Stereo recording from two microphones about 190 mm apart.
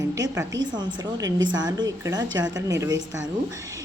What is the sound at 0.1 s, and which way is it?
A woman's voice, 15° right (ahead or behind).